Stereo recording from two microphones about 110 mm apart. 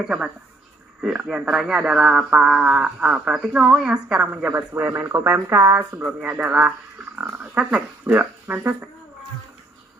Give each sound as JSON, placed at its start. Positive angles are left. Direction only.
{"t": 0.0, "sound": "speech", "side_deg": -5}